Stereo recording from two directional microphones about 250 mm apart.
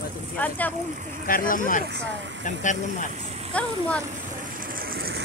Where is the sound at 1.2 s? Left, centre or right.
Left.